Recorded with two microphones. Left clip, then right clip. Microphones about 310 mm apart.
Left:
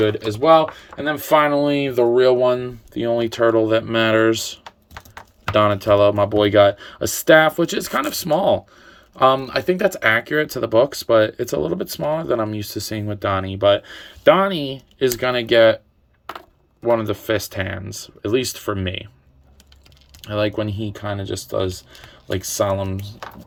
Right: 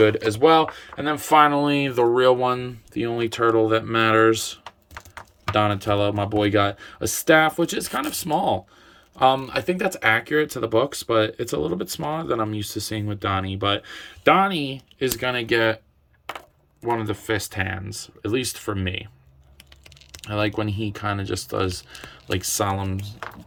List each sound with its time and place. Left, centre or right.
0.0 s speech: centre
17.0 s speech: centre
20.2 s speech: centre